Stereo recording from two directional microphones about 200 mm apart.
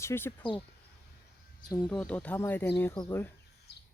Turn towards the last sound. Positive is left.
turn(degrees=10)  # may be behind; listen again after turning